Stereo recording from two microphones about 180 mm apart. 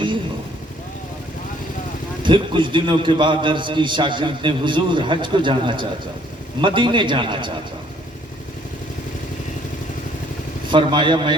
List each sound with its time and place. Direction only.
2.2 s a man's voice: 25° right (ahead or behind)
10.7 s a man's voice: 25° right (ahead or behind)